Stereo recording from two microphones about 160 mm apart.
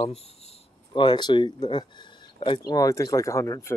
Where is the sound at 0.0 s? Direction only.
40° left (ahead or behind).